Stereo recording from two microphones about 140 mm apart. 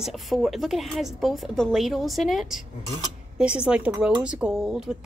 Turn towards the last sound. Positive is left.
turn(degrees=-5)  # may be behind; listen again after turning